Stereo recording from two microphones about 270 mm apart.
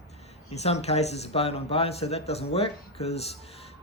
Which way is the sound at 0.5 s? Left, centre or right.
Left.